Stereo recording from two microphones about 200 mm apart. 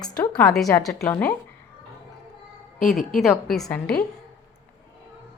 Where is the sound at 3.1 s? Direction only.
Centre (ahead or behind).